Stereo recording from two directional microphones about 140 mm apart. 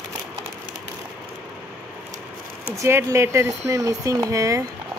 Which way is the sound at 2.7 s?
20° right (ahead or behind).